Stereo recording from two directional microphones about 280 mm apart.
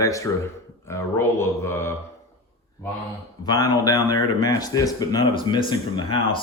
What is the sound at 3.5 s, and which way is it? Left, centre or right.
Speech, centre.